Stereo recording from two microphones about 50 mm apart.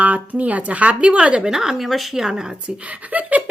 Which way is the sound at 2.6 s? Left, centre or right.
Right.